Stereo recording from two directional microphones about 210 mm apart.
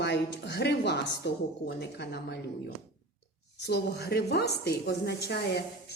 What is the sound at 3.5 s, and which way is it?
A woman's voice, 50° left (ahead or behind).